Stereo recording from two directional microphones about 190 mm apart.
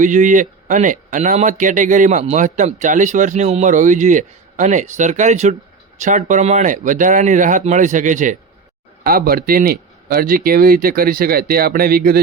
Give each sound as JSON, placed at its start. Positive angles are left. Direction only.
{"t": 0.0, "sound": "a man's voice", "side_deg": -40}